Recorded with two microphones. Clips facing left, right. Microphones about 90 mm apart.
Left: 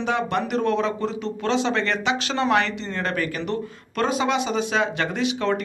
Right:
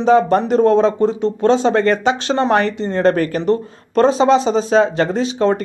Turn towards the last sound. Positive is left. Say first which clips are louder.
# right 7 dB
turn(degrees=-35)  # may be behind; listen again after turning